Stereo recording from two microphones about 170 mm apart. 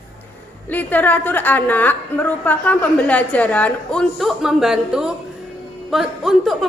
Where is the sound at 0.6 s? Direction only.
10° left (ahead or behind).